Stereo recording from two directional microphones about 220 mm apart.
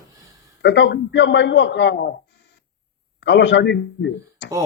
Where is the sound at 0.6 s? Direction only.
50° left (ahead or behind).